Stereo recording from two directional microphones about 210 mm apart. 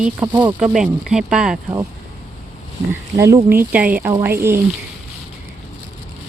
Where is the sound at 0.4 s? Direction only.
5° right (ahead or behind).